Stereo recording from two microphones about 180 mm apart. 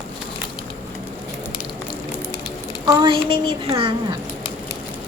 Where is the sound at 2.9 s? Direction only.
25° right (ahead or behind).